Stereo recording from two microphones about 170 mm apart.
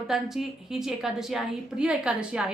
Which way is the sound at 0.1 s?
Centre (ahead or behind).